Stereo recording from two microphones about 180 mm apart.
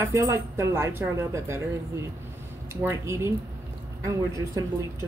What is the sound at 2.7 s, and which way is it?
Speech, 15° right (ahead or behind).